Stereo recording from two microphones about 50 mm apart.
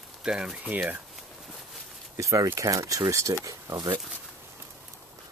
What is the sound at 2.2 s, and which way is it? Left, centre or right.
Speech, right.